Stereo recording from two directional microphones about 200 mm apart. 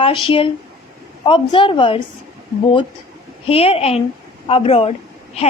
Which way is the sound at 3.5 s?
30° left (ahead or behind).